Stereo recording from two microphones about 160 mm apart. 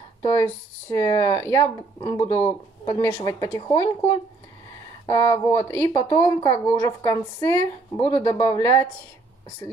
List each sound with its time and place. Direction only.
0.4 s a woman's voice: 15° left (ahead or behind)
2.4 s speech: 35° left (ahead or behind)
3.0 s a woman's voice: 20° left (ahead or behind)